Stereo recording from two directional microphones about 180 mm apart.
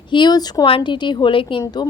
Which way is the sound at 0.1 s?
25° left (ahead or behind).